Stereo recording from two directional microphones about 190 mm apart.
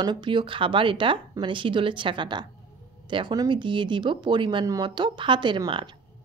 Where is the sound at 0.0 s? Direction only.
25° right (ahead or behind).